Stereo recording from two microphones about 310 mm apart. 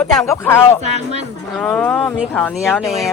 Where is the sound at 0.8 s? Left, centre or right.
Right.